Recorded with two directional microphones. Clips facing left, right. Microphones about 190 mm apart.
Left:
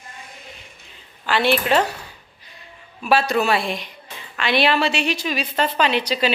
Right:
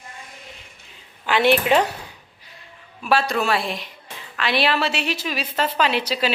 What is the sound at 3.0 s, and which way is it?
A woman's voice, centre (ahead or behind).